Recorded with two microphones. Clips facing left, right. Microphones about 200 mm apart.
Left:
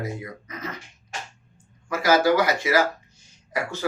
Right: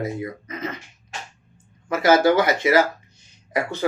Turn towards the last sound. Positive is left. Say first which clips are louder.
# right 4 dB
turn(degrees=-20)  # may be behind; listen again after turning